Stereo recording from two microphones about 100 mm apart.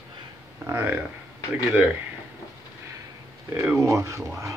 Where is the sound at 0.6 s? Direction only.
20° right (ahead or behind).